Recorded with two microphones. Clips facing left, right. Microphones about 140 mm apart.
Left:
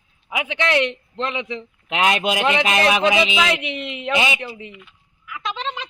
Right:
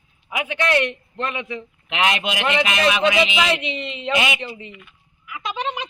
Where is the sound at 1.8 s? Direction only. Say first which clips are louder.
Left 3 dB; 40° left (ahead or behind).